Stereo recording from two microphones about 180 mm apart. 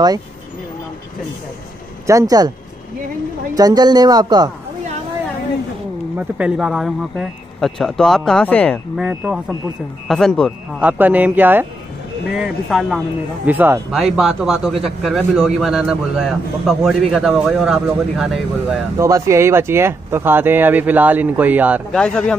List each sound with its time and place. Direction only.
2.0 s speech: 20° right (ahead or behind)
3.5 s speech: 20° right (ahead or behind)
6.1 s speech: 5° right (ahead or behind)
9.1 s speech: 15° right (ahead or behind)
10.0 s speech: centre (ahead or behind)
10.8 s speech: 10° right (ahead or behind)
18.9 s speech: 15° right (ahead or behind)
21.9 s speech: 5° left (ahead or behind)